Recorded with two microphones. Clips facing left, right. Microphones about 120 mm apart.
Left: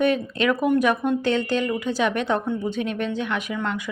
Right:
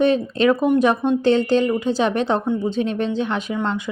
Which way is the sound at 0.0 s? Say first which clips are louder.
Right 4 dB; 30° right (ahead or behind).